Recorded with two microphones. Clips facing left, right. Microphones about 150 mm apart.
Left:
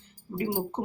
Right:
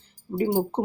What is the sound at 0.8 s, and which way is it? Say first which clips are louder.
Speech: right 4 dB; 45° right (ahead or behind).